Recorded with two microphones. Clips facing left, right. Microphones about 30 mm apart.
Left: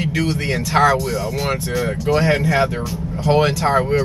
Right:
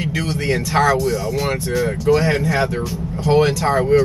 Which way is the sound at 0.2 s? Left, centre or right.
Centre.